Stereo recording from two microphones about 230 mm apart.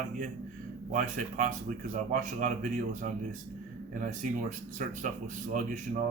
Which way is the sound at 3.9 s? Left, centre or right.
Right.